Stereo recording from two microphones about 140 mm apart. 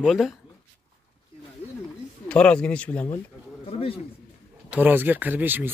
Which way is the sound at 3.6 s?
40° left (ahead or behind).